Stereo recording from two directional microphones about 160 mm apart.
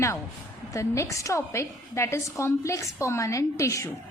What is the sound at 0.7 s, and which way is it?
A woman's voice, 20° left (ahead or behind).